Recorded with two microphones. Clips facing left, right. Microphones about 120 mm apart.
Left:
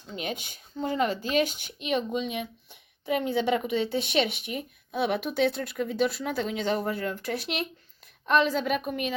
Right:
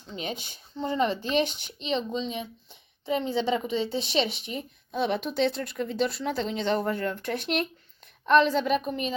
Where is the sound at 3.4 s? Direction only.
25° right (ahead or behind).